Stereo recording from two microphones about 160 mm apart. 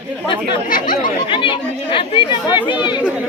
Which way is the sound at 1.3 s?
30° left (ahead or behind).